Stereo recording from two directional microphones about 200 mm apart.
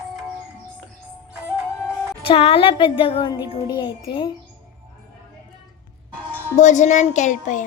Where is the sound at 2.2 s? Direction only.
30° left (ahead or behind).